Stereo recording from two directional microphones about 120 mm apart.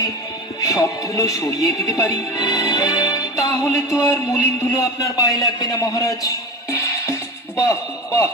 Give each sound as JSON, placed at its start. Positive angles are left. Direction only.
{"t": 0.6, "sound": "speech", "side_deg": 30}